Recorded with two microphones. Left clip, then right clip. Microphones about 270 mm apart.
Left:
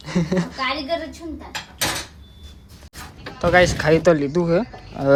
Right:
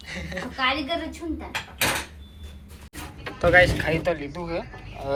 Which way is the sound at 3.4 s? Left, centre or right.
Left.